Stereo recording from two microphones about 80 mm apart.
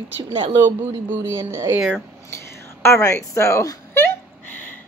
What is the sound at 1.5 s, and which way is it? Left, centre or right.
Speech, right.